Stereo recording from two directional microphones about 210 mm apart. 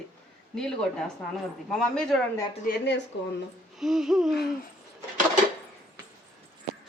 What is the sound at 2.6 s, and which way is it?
Speech, 55° left (ahead or behind).